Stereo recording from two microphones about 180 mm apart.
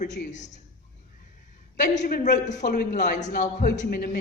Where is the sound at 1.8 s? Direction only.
45° left (ahead or behind).